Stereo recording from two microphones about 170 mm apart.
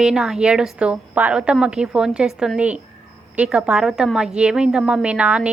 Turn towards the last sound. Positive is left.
turn(degrees=-5)  # may be behind; listen again after turning